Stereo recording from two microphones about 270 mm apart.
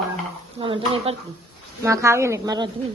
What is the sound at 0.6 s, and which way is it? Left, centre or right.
A woman's voice, centre.